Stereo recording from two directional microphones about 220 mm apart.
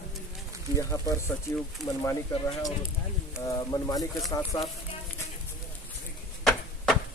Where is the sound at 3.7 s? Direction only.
15° left (ahead or behind).